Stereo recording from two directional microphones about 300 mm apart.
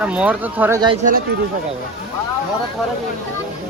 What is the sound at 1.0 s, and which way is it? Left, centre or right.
Speech, right.